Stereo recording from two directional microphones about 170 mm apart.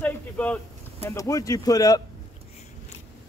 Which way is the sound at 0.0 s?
10° left (ahead or behind).